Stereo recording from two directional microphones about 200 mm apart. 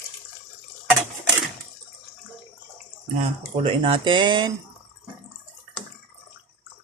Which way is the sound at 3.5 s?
30° right (ahead or behind).